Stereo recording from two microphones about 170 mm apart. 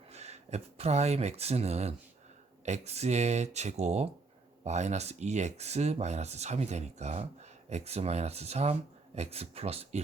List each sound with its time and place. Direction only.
0.1 s speech: 40° right (ahead or behind)